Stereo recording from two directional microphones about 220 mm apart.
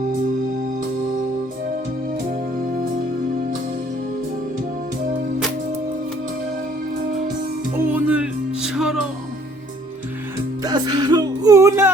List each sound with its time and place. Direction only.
7.8 s music: 10° right (ahead or behind)
10.6 s music: 15° right (ahead or behind)